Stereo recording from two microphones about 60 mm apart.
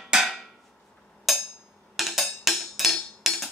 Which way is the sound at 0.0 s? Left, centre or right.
Centre.